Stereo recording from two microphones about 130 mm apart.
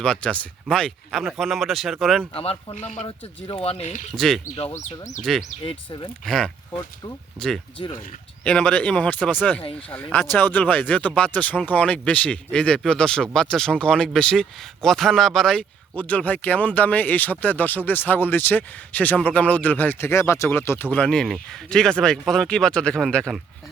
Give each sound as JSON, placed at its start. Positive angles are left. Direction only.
{"t": 0.0, "sound": "speech", "side_deg": 10}
{"t": 2.3, "sound": "speech", "side_deg": 50}
{"t": 2.7, "sound": "speech", "side_deg": 60}
{"t": 4.1, "sound": "speech", "side_deg": 5}
{"t": 4.8, "sound": "speech", "side_deg": 70}
{"t": 5.2, "sound": "speech", "side_deg": 0}
{"t": 5.6, "sound": "speech", "side_deg": 35}
{"t": 6.2, "sound": "speech", "side_deg": 5}